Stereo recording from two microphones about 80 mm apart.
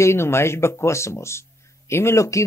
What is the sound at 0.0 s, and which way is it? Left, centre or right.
Speech, left.